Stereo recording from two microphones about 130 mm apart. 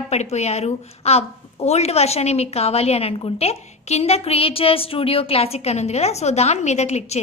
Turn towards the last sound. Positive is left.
turn(degrees=60)  # may be behind; listen again after turning